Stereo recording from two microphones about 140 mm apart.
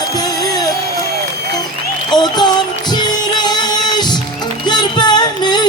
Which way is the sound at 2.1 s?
30° left (ahead or behind).